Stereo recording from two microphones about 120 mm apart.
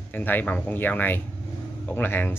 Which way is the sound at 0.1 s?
15° left (ahead or behind).